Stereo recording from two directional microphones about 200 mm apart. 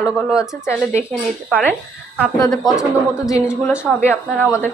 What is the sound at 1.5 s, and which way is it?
Speech, 10° left (ahead or behind).